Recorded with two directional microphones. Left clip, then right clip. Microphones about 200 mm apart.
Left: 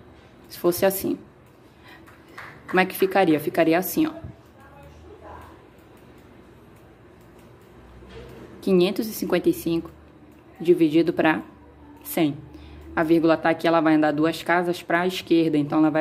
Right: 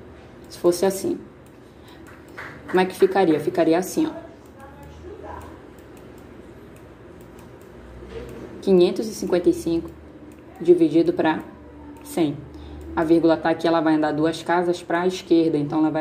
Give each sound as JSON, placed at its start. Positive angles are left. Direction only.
{"t": 0.6, "sound": "speech", "side_deg": 30}
{"t": 2.7, "sound": "speech", "side_deg": 30}
{"t": 8.5, "sound": "speech", "side_deg": 30}
{"t": 12.9, "sound": "speech", "side_deg": 30}